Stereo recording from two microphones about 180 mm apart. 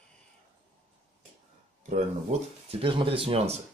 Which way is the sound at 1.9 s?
35° right (ahead or behind).